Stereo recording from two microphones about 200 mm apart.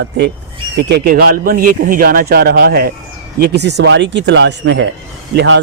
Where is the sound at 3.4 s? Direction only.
60° right (ahead or behind).